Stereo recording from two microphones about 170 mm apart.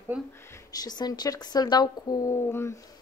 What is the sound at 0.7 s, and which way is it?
Speech, 25° left (ahead or behind).